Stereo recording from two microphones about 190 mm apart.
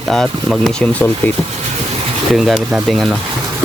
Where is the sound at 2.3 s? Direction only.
Centre (ahead or behind).